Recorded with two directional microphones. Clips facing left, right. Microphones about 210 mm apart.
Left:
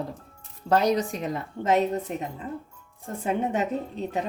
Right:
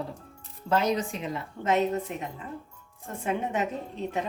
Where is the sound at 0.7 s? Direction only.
40° left (ahead or behind).